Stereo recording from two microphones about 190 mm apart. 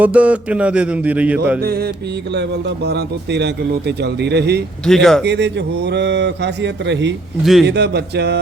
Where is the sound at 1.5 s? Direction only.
55° right (ahead or behind).